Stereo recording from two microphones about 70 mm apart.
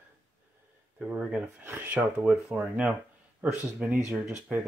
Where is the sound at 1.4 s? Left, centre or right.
Right.